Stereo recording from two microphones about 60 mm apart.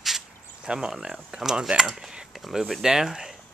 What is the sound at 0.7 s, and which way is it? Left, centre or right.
Speech, centre.